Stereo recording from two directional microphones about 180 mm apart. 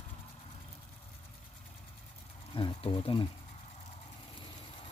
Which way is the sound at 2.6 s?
25° left (ahead or behind).